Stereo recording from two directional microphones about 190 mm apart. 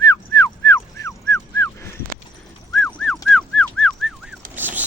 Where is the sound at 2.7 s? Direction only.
5° left (ahead or behind).